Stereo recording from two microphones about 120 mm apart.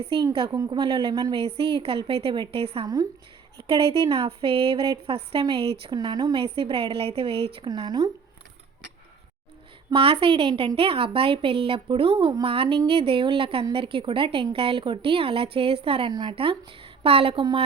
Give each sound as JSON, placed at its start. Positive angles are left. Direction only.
{"t": 0.7, "sound": "speech", "side_deg": -35}
{"t": 1.4, "sound": "speech", "side_deg": -55}
{"t": 2.8, "sound": "speech", "side_deg": -30}
{"t": 3.7, "sound": "speech", "side_deg": -50}
{"t": 5.9, "sound": "speech", "side_deg": -35}
{"t": 6.3, "sound": "speech", "side_deg": -45}
{"t": 7.7, "sound": "speech", "side_deg": -35}
{"t": 9.9, "sound": "speech", "side_deg": -50}